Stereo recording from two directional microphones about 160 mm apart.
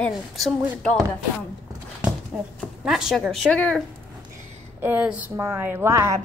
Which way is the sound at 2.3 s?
10° right (ahead or behind).